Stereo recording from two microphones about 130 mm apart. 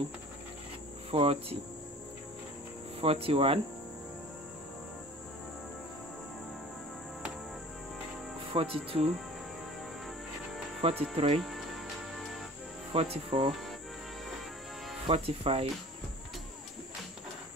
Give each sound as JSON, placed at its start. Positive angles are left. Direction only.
{"t": 1.1, "sound": "speech", "side_deg": -45}
{"t": 3.0, "sound": "speech", "side_deg": -45}
{"t": 8.5, "sound": "speech", "side_deg": -45}
{"t": 10.8, "sound": "speech", "side_deg": -45}
{"t": 11.3, "sound": "speech", "side_deg": 0}
{"t": 12.9, "sound": "speech", "side_deg": -50}
{"t": 15.0, "sound": "speech", "side_deg": -45}